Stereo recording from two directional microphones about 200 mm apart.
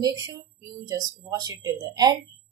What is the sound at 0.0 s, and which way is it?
Speech, 20° right (ahead or behind).